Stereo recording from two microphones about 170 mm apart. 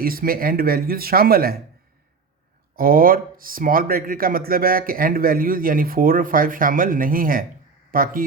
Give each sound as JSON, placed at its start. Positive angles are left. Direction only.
{"t": 0.0, "sound": "speech", "side_deg": -60}
{"t": 2.7, "sound": "speech", "side_deg": -60}